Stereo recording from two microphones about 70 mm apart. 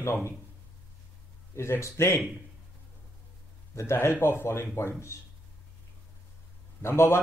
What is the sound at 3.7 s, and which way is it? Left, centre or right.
Speech, left.